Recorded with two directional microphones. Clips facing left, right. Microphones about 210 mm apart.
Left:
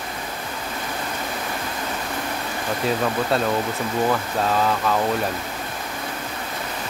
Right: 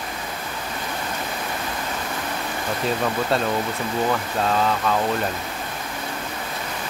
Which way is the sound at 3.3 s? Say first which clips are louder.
Left 1 dB; centre (ahead or behind).